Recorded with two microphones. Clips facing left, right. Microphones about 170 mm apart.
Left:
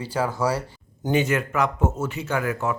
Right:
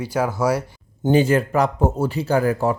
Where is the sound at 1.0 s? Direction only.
30° right (ahead or behind).